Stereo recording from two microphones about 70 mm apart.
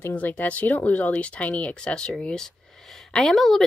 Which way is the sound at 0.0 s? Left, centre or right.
Left.